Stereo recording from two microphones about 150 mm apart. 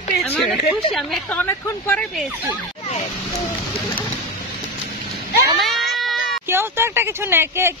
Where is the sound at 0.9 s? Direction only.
5° left (ahead or behind).